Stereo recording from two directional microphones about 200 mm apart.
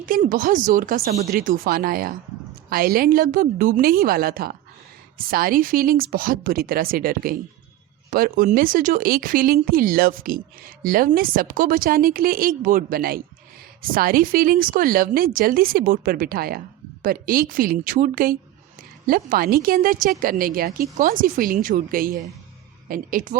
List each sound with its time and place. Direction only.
0.0 s speech: 45° right (ahead or behind)